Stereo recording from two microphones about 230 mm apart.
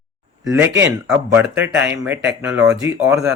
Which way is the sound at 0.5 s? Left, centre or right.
Centre.